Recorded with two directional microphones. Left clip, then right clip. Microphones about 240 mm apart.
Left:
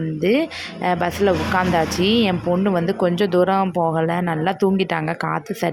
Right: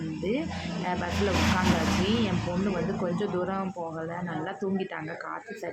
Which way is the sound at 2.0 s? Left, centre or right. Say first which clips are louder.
Left 11 dB; left.